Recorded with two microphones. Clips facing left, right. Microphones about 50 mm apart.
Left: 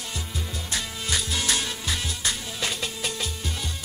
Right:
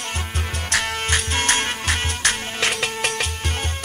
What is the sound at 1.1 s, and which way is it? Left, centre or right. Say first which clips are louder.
Music: right 5 dB; right.